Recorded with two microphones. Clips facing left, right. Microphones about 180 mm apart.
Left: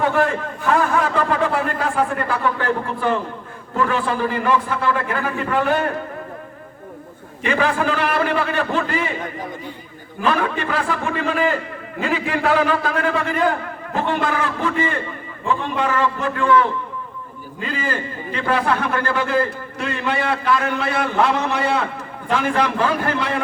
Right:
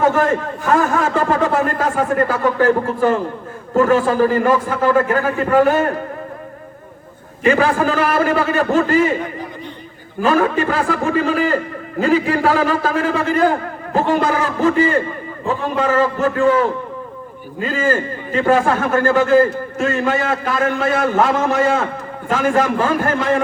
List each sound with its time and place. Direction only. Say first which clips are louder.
0.0 s a man's voice: right 3 dB; 45° right (ahead or behind)
7.4 s a man's voice: right 5 dB; 40° right (ahead or behind)
10.2 s a man's voice: right 5 dB; 40° right (ahead or behind)